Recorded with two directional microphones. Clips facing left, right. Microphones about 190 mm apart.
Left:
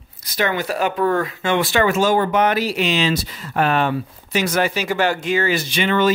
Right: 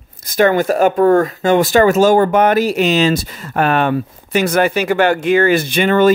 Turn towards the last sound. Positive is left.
turn(degrees=-50)  # may be behind; listen again after turning